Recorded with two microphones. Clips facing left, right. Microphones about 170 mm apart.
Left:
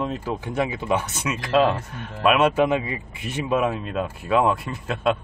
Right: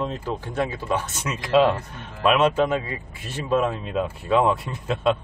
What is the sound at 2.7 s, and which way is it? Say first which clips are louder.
Speech: left 2 dB; 15° left (ahead or behind).